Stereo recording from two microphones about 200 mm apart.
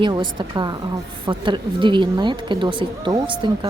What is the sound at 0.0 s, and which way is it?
A woman's voice, 25° right (ahead or behind).